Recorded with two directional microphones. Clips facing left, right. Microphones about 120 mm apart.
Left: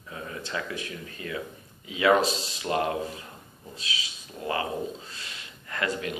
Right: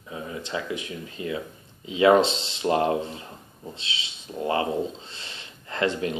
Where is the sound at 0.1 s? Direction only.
20° right (ahead or behind).